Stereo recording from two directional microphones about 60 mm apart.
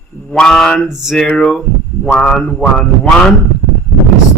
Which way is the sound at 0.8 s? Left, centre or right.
Centre.